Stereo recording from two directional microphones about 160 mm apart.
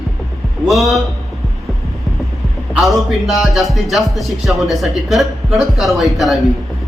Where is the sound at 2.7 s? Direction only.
Centre (ahead or behind).